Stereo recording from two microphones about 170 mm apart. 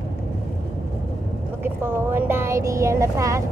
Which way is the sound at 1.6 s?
15° right (ahead or behind).